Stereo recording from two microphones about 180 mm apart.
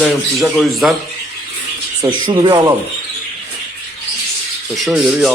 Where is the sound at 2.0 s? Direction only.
25° right (ahead or behind).